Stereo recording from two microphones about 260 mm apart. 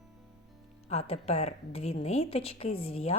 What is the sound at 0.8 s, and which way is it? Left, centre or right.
A woman's voice, left.